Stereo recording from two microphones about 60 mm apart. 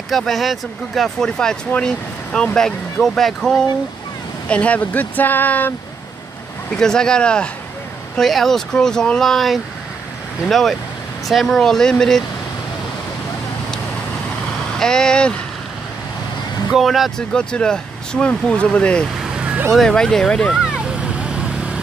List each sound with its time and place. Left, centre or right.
0.1 s speech: centre
4.5 s speech: left
6.8 s speech: centre
8.2 s speech: centre
9.2 s speech: centre
14.8 s speech: centre
16.7 s speech: centre
17.3 s speech: centre
19.3 s vehicle: centre
19.9 s speech: centre
20.8 s vehicle: centre